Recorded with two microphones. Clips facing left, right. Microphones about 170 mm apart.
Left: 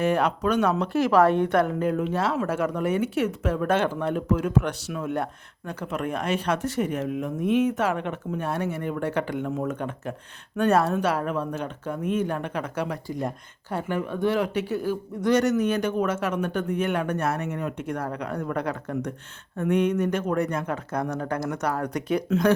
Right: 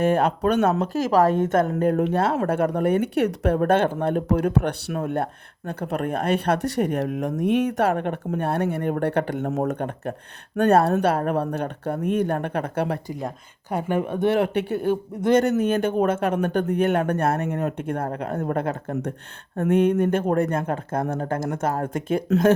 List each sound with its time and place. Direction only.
0.0 s a woman's voice: 50° right (ahead or behind)
13.7 s speech: 20° right (ahead or behind)
14.3 s a woman's voice: 60° right (ahead or behind)